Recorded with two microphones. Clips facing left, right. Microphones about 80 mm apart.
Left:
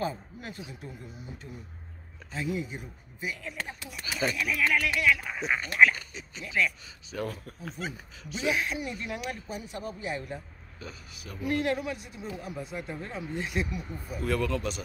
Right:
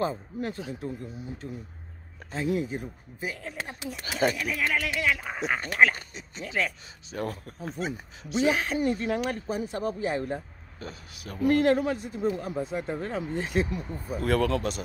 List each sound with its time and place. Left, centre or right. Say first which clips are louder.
0.0 s speech: right 4 dB; right
2.3 s speech: right 5 dB; right
4.0 s speech: right 5 dB; right
4.6 s speech: left 1 dB; right
5.4 s speech: right 1 dB; right